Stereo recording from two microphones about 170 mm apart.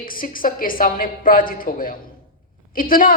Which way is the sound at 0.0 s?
55° left (ahead or behind).